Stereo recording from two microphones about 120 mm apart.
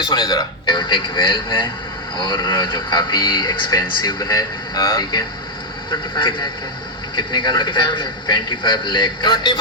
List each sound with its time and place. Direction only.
0.0 s speech: 40° left (ahead or behind)
7.2 s speech: 40° left (ahead or behind)